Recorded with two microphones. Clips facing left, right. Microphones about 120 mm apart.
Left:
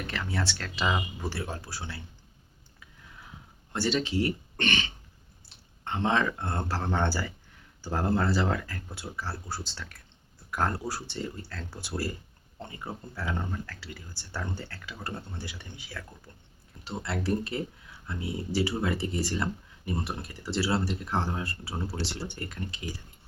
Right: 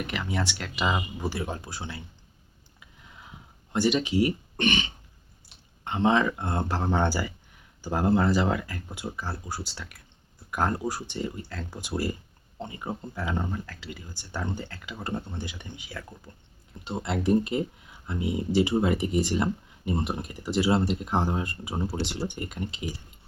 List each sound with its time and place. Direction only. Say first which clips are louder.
0.1 s speech: right 2 dB; 15° right (ahead or behind)
2.8 s a sound: right 1 dB; 20° right (ahead or behind)
3.7 s speech: right 4 dB; 15° right (ahead or behind)